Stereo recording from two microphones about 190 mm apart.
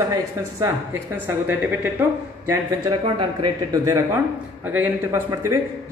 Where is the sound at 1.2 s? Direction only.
10° right (ahead or behind).